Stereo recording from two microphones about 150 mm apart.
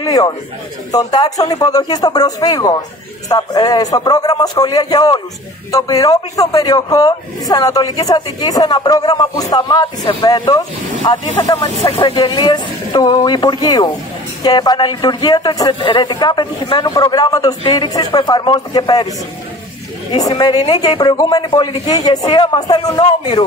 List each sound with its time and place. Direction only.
0.0 s a sound: 25° left (ahead or behind)
0.9 s speech: 25° left (ahead or behind)
11.8 s speech: 40° left (ahead or behind)
20.1 s speech: 25° left (ahead or behind)